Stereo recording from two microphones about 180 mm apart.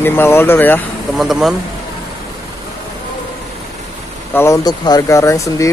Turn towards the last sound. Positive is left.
turn(degrees=15)  # may be behind; listen again after turning